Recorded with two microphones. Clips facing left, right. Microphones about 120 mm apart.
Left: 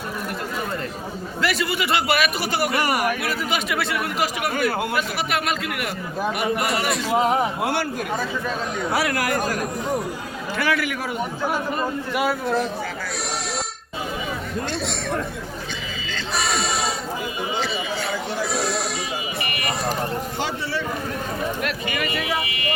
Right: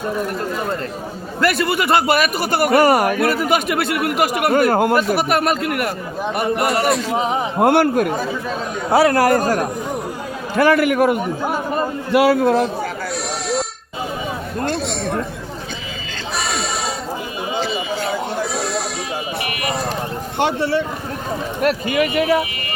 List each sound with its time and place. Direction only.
1.4 s a man's voice: 55° right (ahead or behind)
2.8 s a man's voice: 40° right (ahead or behind)
7.6 s a man's voice: 55° right (ahead or behind)
8.9 s a man's voice: 30° right (ahead or behind); by 11.2 s 55° right (ahead or behind)
12.1 s a man's voice: 90° right
16.4 s music: centre (ahead or behind)
18.5 s a sound: centre (ahead or behind)
20.4 s a sound: 60° right (ahead or behind)
21.6 s a sound: 45° right (ahead or behind)